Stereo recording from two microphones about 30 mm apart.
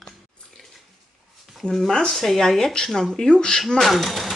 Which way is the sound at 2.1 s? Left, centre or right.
Centre.